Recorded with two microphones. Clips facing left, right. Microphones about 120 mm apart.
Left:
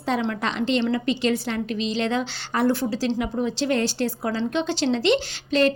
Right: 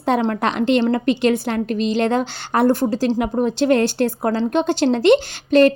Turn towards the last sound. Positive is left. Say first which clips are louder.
# right 7 dB
turn(degrees=-55)  # may be behind; listen again after turning